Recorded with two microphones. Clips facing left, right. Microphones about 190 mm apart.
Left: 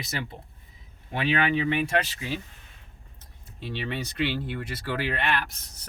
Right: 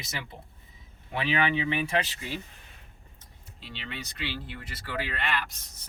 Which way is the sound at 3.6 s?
55° left (ahead or behind).